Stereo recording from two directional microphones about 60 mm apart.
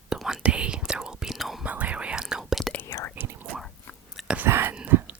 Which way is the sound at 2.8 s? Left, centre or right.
Left.